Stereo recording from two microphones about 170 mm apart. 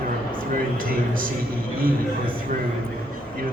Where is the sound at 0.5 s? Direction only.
55° right (ahead or behind).